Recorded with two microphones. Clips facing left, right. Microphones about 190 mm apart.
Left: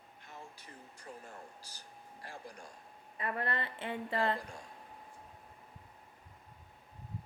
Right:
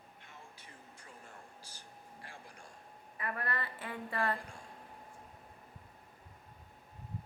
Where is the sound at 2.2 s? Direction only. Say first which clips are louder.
Left 6 dB; 40° left (ahead or behind).